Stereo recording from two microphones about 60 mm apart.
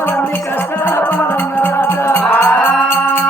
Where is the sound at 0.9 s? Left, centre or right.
Left.